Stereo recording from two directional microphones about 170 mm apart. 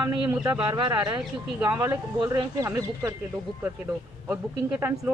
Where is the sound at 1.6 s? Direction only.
15° right (ahead or behind).